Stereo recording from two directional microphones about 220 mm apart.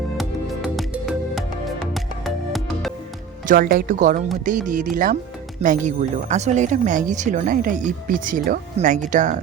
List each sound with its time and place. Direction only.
0.8 s music: centre (ahead or behind)
3.4 s speech: 40° right (ahead or behind)